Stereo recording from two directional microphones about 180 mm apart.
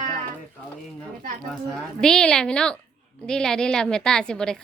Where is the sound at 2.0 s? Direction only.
5° left (ahead or behind).